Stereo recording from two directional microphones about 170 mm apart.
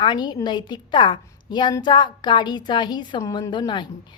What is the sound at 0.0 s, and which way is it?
A woman's voice, 25° left (ahead or behind).